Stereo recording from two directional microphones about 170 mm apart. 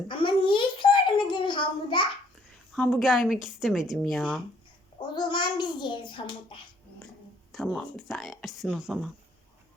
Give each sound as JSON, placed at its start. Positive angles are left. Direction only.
{"t": 0.1, "sound": "a sound", "side_deg": 30}
{"t": 2.7, "sound": "speech", "side_deg": 5}
{"t": 5.1, "sound": "a child's voice", "side_deg": 25}
{"t": 7.5, "sound": "speech", "side_deg": 0}